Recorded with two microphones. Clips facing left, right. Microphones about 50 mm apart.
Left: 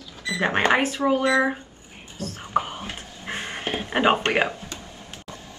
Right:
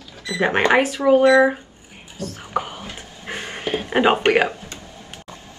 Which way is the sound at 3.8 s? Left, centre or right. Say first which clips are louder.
Right 4 dB; right.